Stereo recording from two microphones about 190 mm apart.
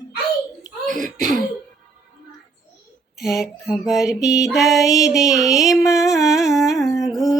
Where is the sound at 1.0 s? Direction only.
Centre (ahead or behind).